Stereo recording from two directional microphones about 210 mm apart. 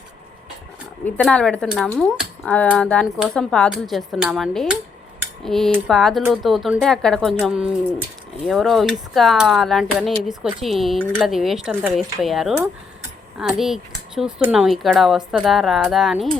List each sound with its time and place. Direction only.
1.0 s speech: 5° left (ahead or behind)